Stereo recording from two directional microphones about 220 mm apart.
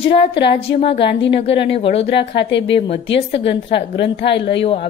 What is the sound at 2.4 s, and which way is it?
Speech, 55° left (ahead or behind).